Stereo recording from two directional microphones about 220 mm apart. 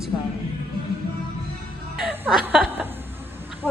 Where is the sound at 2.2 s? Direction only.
5° right (ahead or behind).